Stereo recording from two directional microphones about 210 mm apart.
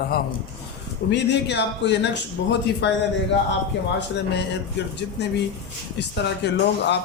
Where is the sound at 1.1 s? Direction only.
55° left (ahead or behind).